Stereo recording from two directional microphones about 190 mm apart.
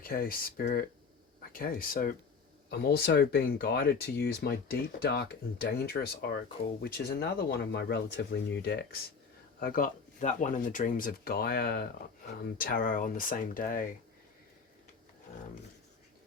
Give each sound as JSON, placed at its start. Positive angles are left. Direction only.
{"t": 0.0, "sound": "speech", "side_deg": 50}
{"t": 9.6, "sound": "speech", "side_deg": 50}